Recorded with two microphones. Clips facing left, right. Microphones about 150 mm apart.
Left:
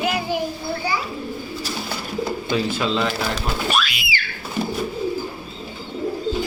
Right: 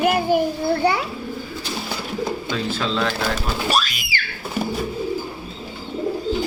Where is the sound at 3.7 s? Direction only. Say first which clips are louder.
Right 1 dB; 40° right (ahead or behind).